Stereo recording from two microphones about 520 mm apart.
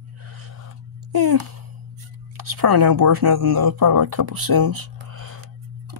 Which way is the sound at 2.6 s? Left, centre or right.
Right.